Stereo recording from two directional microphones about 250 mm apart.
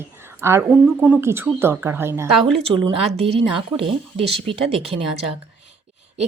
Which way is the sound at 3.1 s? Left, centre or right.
Right.